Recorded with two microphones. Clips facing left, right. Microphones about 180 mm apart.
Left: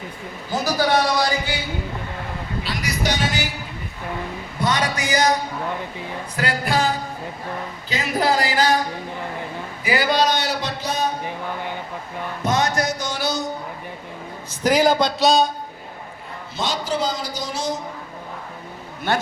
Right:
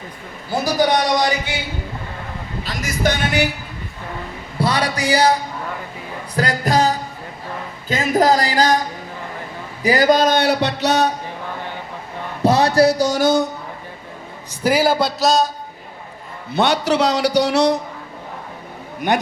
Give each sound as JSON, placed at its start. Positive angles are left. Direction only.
{"t": 0.6, "sound": "a sound", "side_deg": -20}
{"t": 2.6, "sound": "speech", "side_deg": -50}
{"t": 4.6, "sound": "speech", "side_deg": -35}
{"t": 6.3, "sound": "music", "side_deg": -40}
{"t": 7.9, "sound": "speech", "side_deg": -45}
{"t": 9.8, "sound": "a man's voice", "side_deg": -40}
{"t": 12.4, "sound": "speech", "side_deg": -35}
{"t": 14.6, "sound": "speech", "side_deg": -10}
{"t": 16.6, "sound": "a man's voice", "side_deg": -65}
{"t": 19.0, "sound": "speech", "side_deg": -15}